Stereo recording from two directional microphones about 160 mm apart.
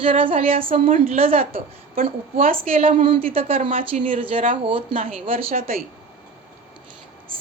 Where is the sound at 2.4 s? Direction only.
35° right (ahead or behind).